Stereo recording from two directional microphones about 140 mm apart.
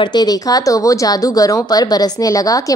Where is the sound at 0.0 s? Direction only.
30° left (ahead or behind).